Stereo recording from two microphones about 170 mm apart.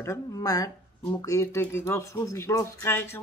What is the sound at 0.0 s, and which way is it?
Speech, 20° left (ahead or behind).